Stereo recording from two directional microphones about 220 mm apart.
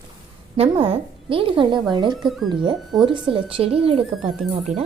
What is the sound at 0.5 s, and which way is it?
A woman's voice, 25° right (ahead or behind).